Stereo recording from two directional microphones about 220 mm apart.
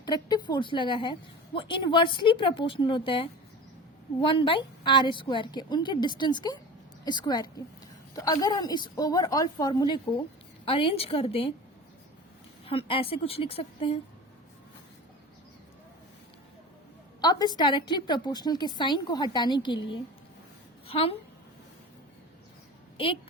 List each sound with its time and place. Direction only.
0.0 s a woman's voice: 20° left (ahead or behind)
12.6 s a woman's voice: 25° left (ahead or behind)
17.2 s a woman's voice: 20° left (ahead or behind)